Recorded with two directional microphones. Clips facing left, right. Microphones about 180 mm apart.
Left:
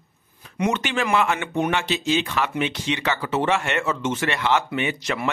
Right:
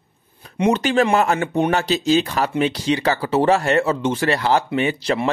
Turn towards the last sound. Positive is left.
turn(degrees=-35)  # may be behind; listen again after turning